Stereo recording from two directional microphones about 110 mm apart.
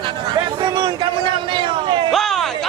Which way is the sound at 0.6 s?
40° right (ahead or behind).